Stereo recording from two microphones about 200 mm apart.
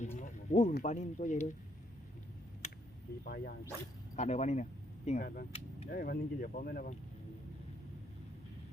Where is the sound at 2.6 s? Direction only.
35° left (ahead or behind).